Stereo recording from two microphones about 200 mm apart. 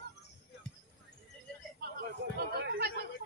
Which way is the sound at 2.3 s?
50° right (ahead or behind).